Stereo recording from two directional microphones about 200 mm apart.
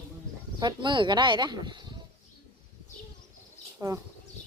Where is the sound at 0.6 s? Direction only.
25° right (ahead or behind).